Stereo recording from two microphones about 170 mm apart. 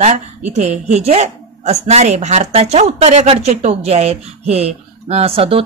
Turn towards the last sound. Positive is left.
turn(degrees=-35)  # may be behind; listen again after turning